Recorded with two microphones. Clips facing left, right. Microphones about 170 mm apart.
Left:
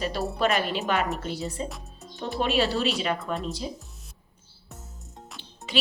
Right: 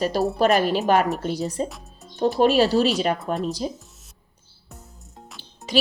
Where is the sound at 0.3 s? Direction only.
40° right (ahead or behind).